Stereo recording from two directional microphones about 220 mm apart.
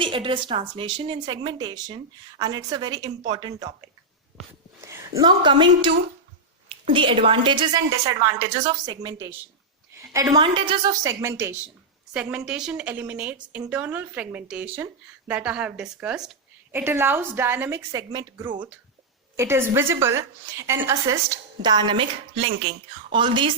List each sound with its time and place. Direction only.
0.0 s a woman's voice: 25° right (ahead or behind)
4.9 s a woman's voice: 15° right (ahead or behind)